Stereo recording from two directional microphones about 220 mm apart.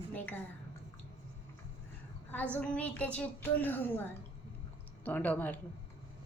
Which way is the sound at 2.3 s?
5° left (ahead or behind).